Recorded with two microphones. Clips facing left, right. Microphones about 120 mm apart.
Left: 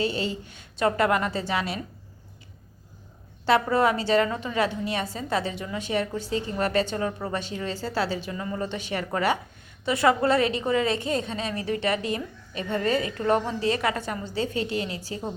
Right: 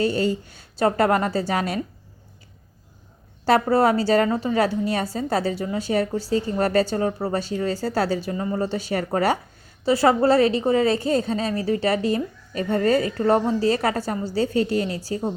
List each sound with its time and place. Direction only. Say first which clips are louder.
0.0 s a woman's voice: right 6 dB; 45° right (ahead or behind)
3.4 s a woman's voice: right 3 dB; 40° right (ahead or behind)